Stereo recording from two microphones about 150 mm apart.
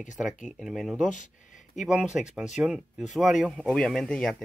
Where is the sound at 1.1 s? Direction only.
55° left (ahead or behind).